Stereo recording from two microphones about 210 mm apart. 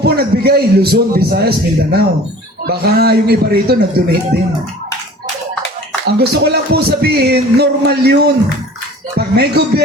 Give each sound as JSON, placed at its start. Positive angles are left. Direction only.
{"t": 0.0, "sound": "speech", "side_deg": -50}
{"t": 6.1, "sound": "speech", "side_deg": -50}